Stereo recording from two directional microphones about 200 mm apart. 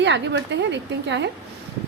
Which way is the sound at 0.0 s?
60° right (ahead or behind).